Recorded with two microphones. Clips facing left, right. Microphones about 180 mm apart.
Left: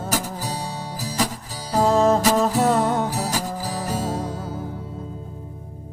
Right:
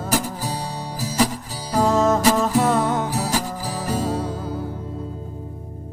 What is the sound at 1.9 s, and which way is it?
Music, 35° left (ahead or behind).